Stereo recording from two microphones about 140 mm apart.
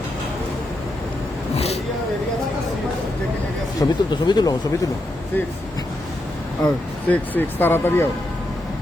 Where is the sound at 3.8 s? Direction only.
30° left (ahead or behind).